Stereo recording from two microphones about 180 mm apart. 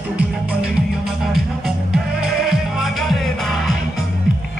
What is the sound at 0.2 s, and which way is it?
Music, 5° right (ahead or behind).